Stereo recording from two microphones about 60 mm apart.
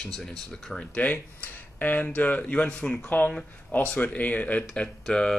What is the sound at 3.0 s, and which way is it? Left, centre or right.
Speech, left.